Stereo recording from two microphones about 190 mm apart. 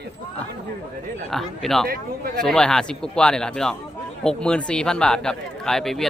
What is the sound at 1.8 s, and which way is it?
Speech, 50° right (ahead or behind).